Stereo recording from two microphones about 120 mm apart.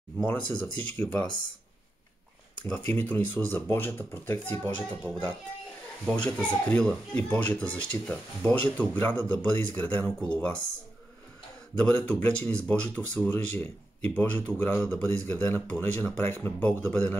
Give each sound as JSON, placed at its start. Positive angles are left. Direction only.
{"t": 0.3, "sound": "speech", "side_deg": 15}
{"t": 2.6, "sound": "speech", "side_deg": 15}
{"t": 11.8, "sound": "speech", "side_deg": 15}